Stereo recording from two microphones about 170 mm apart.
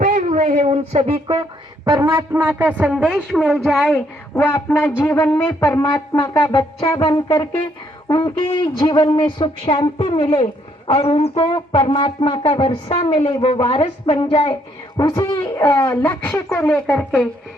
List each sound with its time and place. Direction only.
0.0 s a woman's voice: 45° right (ahead or behind)
1.8 s a man's voice: 20° right (ahead or behind); by 4.0 s 5° left (ahead or behind)
4.4 s speech: 15° left (ahead or behind)
5.8 s a woman's voice: 30° left (ahead or behind)
14.9 s a man's voice: 20° left (ahead or behind)